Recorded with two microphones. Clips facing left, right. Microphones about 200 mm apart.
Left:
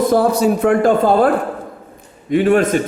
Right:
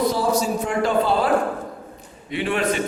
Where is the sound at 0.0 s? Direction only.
55° left (ahead or behind).